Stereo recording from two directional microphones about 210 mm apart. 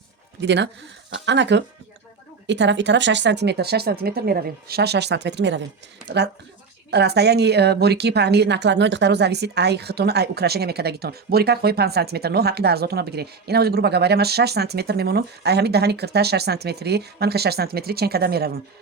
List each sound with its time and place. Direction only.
0.4 s a woman's voice: 55° right (ahead or behind)
6.9 s a woman's voice: 50° right (ahead or behind)